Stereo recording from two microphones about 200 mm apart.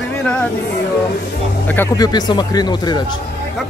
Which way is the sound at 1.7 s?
15° left (ahead or behind).